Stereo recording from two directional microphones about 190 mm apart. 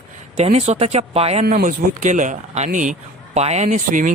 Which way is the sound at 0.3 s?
35° right (ahead or behind).